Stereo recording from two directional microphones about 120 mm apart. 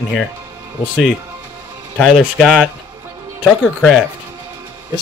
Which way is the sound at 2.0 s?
5° right (ahead or behind).